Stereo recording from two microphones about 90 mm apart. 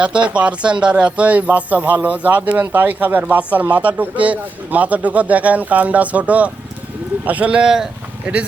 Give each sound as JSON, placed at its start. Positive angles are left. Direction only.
{"t": 0.0, "sound": "speech", "side_deg": -15}